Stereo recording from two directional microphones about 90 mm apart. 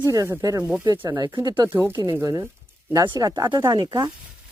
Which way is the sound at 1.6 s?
25° right (ahead or behind).